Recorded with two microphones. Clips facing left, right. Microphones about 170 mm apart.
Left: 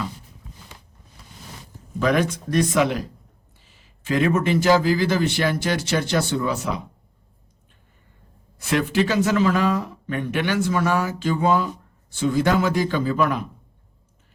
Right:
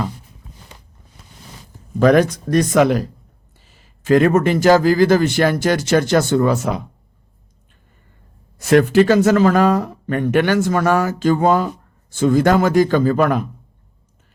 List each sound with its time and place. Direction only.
2.0 s speech: 45° right (ahead or behind)
8.5 s speech: 45° right (ahead or behind)